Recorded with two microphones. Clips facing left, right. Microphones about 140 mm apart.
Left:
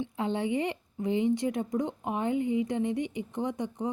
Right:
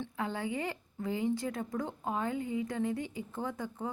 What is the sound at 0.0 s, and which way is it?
Speech, 25° left (ahead or behind).